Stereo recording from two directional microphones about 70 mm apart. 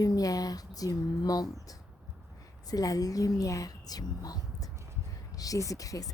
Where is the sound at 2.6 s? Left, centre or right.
Left.